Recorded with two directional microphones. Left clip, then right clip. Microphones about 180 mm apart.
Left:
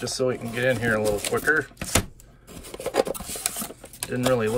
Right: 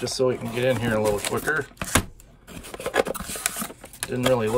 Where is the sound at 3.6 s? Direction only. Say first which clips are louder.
Right 2 dB; 15° right (ahead or behind).